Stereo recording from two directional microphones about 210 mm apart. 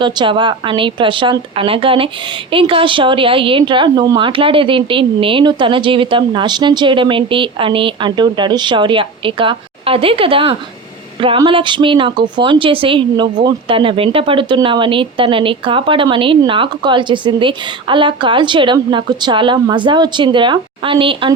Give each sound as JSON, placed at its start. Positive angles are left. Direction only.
{"t": 0.0, "sound": "a woman's voice", "side_deg": -20}